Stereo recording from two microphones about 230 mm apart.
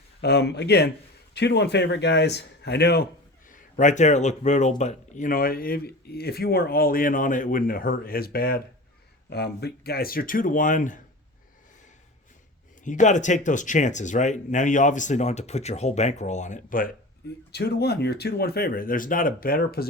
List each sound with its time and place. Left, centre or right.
0.2 s speech: left
3.5 s speech: left
12.8 s speech: left